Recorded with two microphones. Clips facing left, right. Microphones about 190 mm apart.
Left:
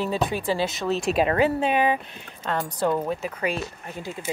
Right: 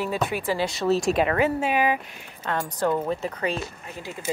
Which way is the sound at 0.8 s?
Centre (ahead or behind).